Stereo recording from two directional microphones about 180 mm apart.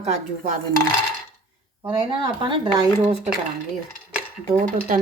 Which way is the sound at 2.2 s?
25° right (ahead or behind).